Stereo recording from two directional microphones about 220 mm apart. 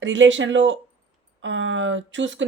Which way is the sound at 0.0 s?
55° right (ahead or behind).